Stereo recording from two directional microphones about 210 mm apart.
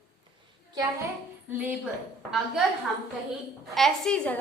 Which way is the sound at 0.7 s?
15° right (ahead or behind).